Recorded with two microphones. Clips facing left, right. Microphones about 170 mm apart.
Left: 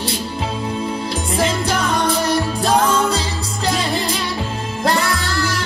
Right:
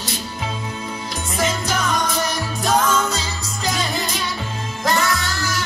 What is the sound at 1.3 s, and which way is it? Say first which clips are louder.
Music: left 3 dB; 30° left (ahead or behind).